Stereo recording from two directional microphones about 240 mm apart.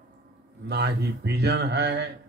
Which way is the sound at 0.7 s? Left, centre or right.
Right.